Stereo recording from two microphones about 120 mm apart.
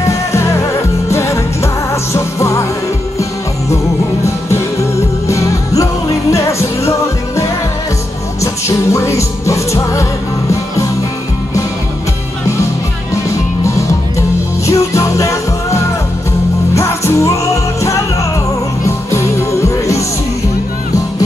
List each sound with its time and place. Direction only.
0.0 s music: 25° left (ahead or behind)
6.3 s music: 25° left (ahead or behind)
14.7 s music: 25° left (ahead or behind)
19.0 s music: 25° left (ahead or behind)